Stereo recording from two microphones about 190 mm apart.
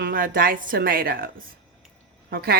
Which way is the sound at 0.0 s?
50° right (ahead or behind).